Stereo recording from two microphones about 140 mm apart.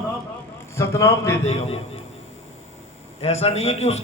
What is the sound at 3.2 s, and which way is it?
Speech, 45° left (ahead or behind).